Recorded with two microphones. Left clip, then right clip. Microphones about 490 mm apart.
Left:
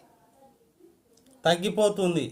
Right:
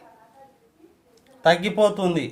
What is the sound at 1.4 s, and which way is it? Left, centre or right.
Speech, left.